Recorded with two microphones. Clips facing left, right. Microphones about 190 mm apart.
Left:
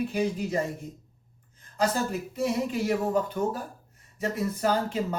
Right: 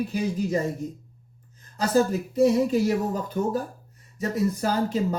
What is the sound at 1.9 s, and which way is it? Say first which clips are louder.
Speech: right 8 dB; 40° right (ahead or behind).